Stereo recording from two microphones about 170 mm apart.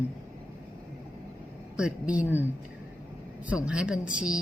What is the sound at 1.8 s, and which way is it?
Speech, 5° right (ahead or behind).